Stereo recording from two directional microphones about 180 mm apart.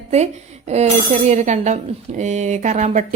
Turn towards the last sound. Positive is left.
turn(degrees=-40)  # may be behind; listen again after turning